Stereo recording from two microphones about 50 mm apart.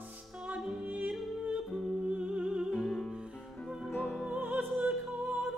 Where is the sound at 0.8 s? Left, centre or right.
Right.